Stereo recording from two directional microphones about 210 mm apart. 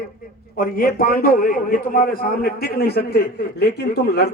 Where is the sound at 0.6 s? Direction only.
40° left (ahead or behind).